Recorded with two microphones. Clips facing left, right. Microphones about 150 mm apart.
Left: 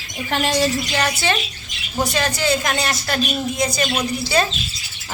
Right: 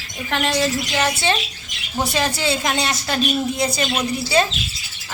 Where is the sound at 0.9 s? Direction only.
20° right (ahead or behind).